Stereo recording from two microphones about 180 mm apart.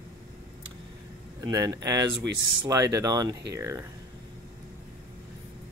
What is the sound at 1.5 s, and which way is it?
Speech, 20° right (ahead or behind).